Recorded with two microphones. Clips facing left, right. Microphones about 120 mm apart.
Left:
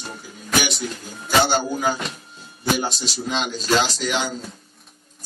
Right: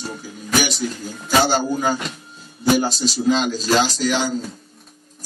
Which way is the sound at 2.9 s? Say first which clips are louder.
Right 8 dB; 35° right (ahead or behind).